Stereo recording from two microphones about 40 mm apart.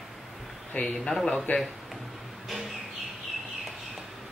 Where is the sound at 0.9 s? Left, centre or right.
Centre.